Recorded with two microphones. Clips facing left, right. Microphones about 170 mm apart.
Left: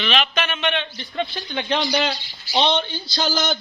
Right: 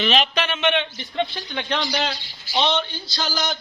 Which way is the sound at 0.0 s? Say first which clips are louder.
Right 2 dB; 40° right (ahead or behind).